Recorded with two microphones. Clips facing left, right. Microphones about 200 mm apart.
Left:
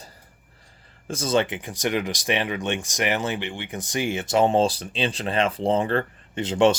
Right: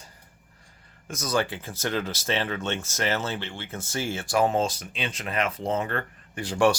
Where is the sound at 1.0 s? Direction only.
30° left (ahead or behind).